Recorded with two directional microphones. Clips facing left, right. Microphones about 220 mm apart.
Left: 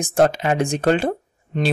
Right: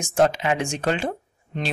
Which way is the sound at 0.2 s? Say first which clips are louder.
Left 3 dB; 50° left (ahead or behind).